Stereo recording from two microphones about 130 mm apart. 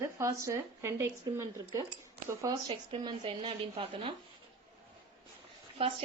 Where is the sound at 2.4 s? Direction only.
30° right (ahead or behind).